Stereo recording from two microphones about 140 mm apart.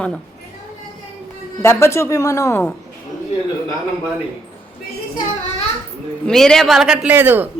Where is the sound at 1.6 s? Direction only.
20° left (ahead or behind).